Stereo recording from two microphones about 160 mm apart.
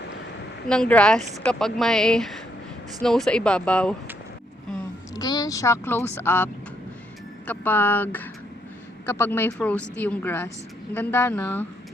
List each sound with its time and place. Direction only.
0.7 s speech: 5° left (ahead or behind)
5.1 s speech: 25° left (ahead or behind)